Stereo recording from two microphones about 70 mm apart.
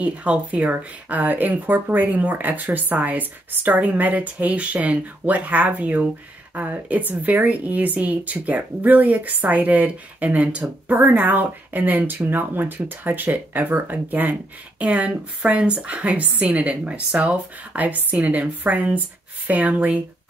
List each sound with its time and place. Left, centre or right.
0.0 s speech: centre